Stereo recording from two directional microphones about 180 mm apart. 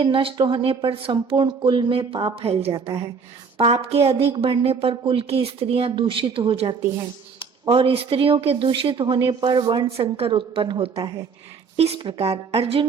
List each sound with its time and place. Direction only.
0.0 s a woman's voice: 30° right (ahead or behind)
11.0 s speech: 20° right (ahead or behind)
11.8 s a woman's voice: 35° right (ahead or behind)